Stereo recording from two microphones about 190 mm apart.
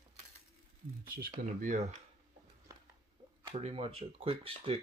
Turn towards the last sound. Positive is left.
turn(degrees=-30)  # may be behind; listen again after turning